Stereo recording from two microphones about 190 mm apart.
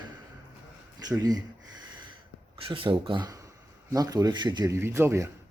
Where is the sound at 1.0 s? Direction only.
20° right (ahead or behind).